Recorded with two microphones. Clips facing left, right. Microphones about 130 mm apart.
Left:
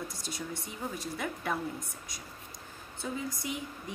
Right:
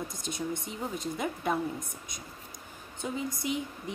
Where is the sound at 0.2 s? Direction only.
20° right (ahead or behind).